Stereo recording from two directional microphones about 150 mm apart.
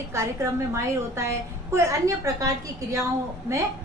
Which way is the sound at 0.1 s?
20° right (ahead or behind).